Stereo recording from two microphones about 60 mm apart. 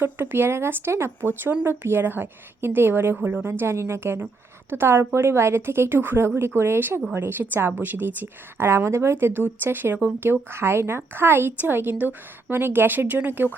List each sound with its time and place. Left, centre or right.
0.0 s a woman's voice: right
1.3 s a woman's voice: right
9.1 s a woman's voice: right